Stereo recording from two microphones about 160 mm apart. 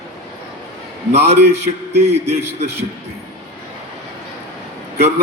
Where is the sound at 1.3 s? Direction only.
40° right (ahead or behind).